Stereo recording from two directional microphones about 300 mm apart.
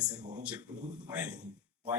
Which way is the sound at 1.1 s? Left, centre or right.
Centre.